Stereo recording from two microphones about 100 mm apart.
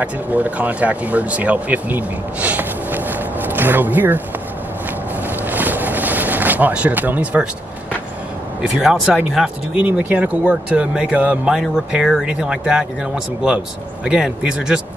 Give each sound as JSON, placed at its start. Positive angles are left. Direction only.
{"t": 0.0, "sound": "speech", "side_deg": -15}
{"t": 4.8, "sound": "boat", "side_deg": -15}
{"t": 8.5, "sound": "speech", "side_deg": -5}